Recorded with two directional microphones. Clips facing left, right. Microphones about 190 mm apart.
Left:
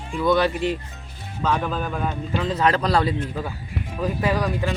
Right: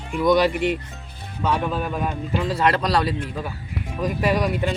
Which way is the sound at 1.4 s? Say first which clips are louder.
Right 1 dB; 5° right (ahead or behind).